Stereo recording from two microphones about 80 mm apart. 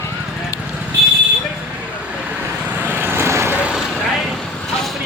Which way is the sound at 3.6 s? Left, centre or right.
Centre.